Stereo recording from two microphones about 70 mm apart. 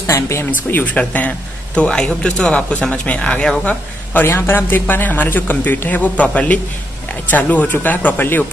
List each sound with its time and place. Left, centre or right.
0.0 s speech: left
0.5 s a man's voice: left
3.6 s a man's voice: left